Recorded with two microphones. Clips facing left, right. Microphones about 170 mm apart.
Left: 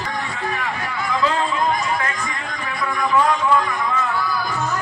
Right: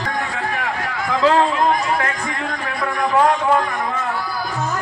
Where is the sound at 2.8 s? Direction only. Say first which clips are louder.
Right 2 dB; 55° right (ahead or behind).